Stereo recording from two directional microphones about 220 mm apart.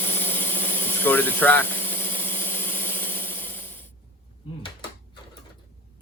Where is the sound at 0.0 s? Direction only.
10° left (ahead or behind).